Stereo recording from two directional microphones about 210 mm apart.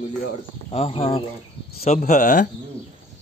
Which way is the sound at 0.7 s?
25° left (ahead or behind).